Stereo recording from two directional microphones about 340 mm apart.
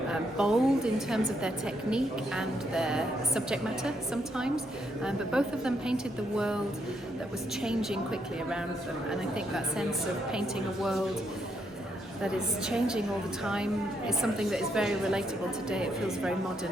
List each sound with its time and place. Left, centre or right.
0.1 s a woman's voice: centre
7.6 s a woman's voice: centre
12.2 s a woman's voice: centre